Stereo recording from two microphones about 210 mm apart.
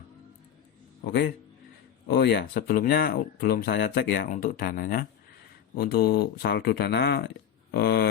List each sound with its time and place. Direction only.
1.0 s speech: 50° left (ahead or behind)